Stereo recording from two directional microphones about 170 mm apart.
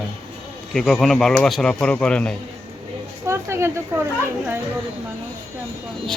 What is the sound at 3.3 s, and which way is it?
Speech, 15° right (ahead or behind).